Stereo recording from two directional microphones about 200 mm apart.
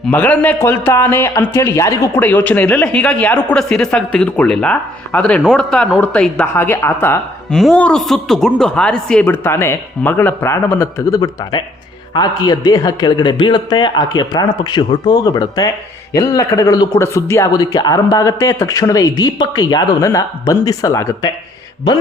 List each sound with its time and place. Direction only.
0.1 s a man's voice: 10° left (ahead or behind)